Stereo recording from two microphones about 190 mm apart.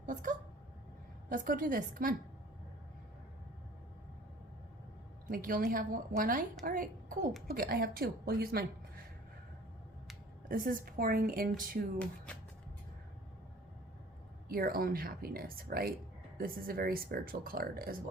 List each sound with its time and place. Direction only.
0.0 s speech: 45° right (ahead or behind)
5.3 s speech: 45° right (ahead or behind)
10.5 s speech: 45° right (ahead or behind)
11.9 s speech: 5° left (ahead or behind)
14.5 s speech: 50° right (ahead or behind)